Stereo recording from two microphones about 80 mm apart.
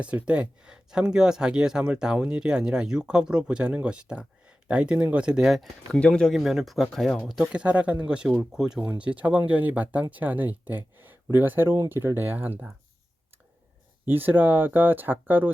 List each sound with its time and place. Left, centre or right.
0.0 s speech: centre
5.9 s speech: centre
6.3 s speech: centre; by 12.7 s right
14.0 s speech: right